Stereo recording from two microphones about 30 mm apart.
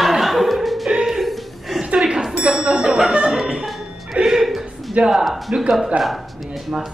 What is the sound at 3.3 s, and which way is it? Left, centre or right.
Music, centre.